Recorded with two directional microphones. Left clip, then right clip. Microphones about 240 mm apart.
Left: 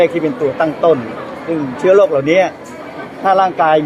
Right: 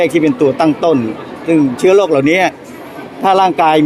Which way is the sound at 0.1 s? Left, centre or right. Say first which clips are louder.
Right 4 dB; right.